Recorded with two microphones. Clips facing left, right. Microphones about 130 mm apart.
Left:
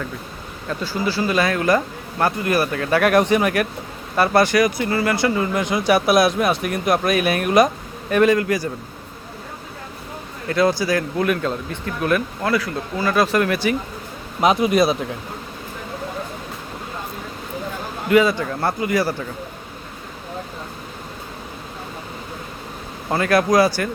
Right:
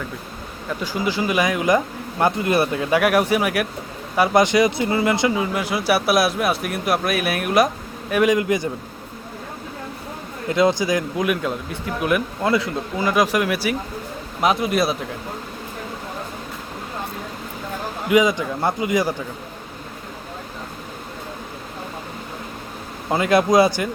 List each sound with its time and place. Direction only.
0.7 s speech: 15° right (ahead or behind)
5.3 s speech: 10° right (ahead or behind)
10.5 s speech: 20° right (ahead or behind)
14.4 s speech: centre (ahead or behind)
18.1 s speech: 15° right (ahead or behind)
23.1 s speech: 20° right (ahead or behind)